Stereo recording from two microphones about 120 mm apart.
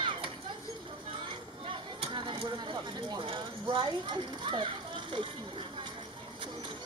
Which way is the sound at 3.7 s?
40° right (ahead or behind).